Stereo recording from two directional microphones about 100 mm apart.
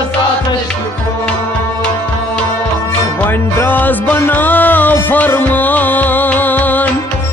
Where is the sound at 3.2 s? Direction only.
20° left (ahead or behind).